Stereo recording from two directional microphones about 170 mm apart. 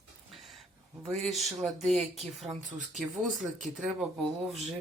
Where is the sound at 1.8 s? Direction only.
40° right (ahead or behind).